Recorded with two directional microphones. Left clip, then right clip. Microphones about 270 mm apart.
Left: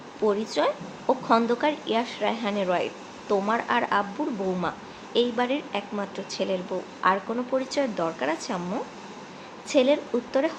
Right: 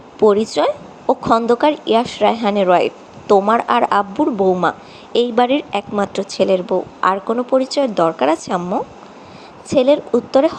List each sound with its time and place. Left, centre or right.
0.2 s a woman's voice: right
5.1 s a woman's voice: right
9.6 s a woman's voice: right